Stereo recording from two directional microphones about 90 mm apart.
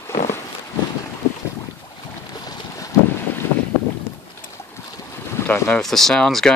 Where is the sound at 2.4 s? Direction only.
40° left (ahead or behind).